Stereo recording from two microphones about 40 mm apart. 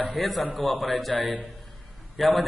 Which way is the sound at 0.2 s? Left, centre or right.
Centre.